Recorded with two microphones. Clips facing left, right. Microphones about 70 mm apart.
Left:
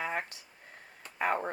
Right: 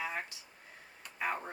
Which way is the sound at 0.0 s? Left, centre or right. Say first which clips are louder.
Left 4 dB; left.